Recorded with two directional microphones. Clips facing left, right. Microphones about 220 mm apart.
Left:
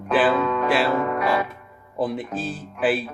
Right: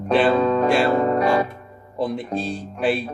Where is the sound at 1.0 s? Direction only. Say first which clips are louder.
Right 4 dB; 30° right (ahead or behind).